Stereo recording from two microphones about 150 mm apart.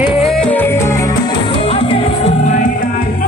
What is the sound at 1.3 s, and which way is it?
Music, 35° left (ahead or behind).